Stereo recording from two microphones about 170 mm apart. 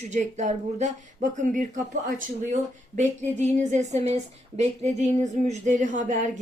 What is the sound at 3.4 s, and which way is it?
A woman's voice, 40° right (ahead or behind).